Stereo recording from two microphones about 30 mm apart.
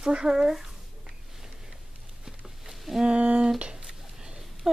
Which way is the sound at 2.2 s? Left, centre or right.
Centre.